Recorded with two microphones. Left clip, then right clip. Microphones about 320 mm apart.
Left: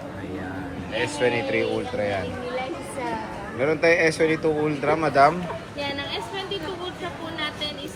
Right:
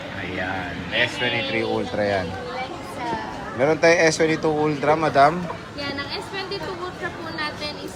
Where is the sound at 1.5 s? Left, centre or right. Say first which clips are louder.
Right 1 dB; centre.